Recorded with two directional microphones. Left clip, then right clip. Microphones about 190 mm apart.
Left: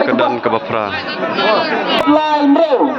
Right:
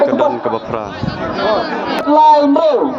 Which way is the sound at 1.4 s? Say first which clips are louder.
Left 2 dB; 65° right (ahead or behind).